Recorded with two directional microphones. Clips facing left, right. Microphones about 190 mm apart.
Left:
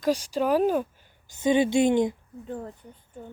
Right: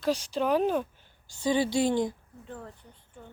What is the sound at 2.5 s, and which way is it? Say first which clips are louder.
Speech: left 7 dB; 35° left (ahead or behind).